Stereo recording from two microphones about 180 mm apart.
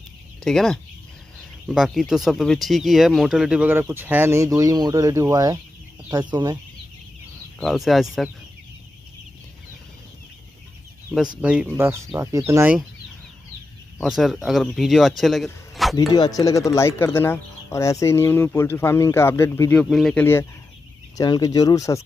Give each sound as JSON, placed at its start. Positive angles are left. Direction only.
{"t": 0.4, "sound": "speech", "side_deg": 0}
{"t": 7.6, "sound": "speech", "side_deg": 0}
{"t": 11.1, "sound": "speech", "side_deg": -5}
{"t": 13.9, "sound": "speech", "side_deg": 0}
{"t": 16.1, "sound": "speech", "side_deg": 20}
{"t": 19.8, "sound": "speech", "side_deg": 0}
{"t": 21.2, "sound": "speech", "side_deg": 20}